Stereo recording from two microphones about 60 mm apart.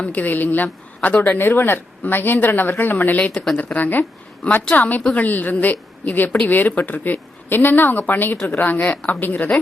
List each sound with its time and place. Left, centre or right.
0.0 s a woman's voice: left
4.4 s a woman's voice: centre